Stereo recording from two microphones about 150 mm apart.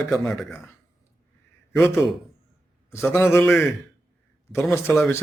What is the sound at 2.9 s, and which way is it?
Speech, 15° left (ahead or behind).